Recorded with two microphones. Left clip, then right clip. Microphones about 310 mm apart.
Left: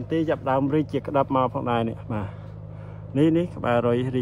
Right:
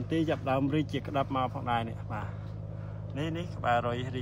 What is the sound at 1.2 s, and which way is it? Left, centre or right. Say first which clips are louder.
Speech: left 9 dB; left.